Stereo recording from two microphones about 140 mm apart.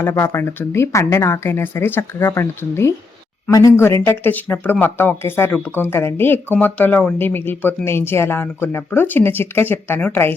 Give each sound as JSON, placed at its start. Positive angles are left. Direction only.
{"t": 0.0, "sound": "speech", "side_deg": 15}